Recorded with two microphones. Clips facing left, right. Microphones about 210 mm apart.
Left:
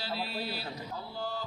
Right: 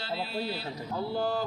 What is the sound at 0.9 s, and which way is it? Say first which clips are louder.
Speech: right 11 dB; 75° right (ahead or behind).